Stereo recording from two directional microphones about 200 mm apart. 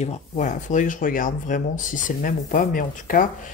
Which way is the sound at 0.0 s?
35° left (ahead or behind).